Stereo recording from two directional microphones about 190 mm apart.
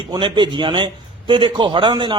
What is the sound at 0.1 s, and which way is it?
A man's voice, 25° right (ahead or behind).